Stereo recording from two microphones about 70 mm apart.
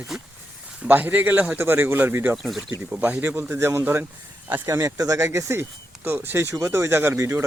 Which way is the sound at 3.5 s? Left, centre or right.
Right.